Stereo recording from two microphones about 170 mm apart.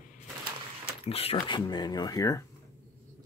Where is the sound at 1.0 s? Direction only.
35° left (ahead or behind); by 2.4 s 20° left (ahead or behind).